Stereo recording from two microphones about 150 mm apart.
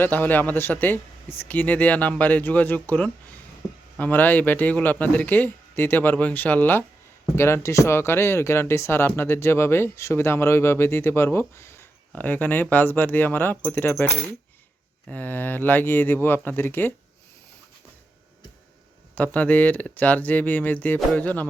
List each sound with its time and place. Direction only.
0.0 s speech: 10° left (ahead or behind)
19.1 s speech: 10° left (ahead or behind)